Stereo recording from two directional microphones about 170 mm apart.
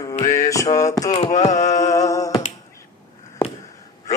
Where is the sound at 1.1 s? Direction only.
40° left (ahead or behind).